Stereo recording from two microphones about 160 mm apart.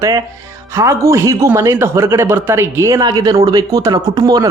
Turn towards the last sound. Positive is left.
turn(degrees=-25)  # may be behind; listen again after turning